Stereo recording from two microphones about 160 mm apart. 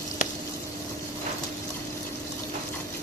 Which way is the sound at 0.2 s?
55° left (ahead or behind).